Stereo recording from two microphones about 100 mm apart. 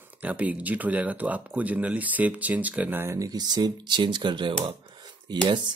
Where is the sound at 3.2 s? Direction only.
40° right (ahead or behind).